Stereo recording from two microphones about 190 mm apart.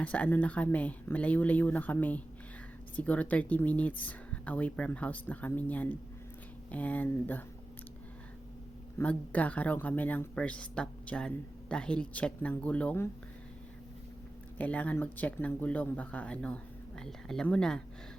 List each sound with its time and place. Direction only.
0.0 s speech: 5° left (ahead or behind)
9.0 s speech: 10° left (ahead or behind)
14.6 s speech: 10° left (ahead or behind)